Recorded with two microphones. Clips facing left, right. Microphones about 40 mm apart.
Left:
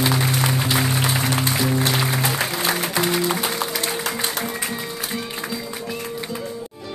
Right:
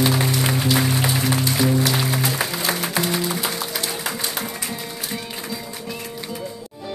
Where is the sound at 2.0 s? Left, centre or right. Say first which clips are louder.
Left 1 dB; centre.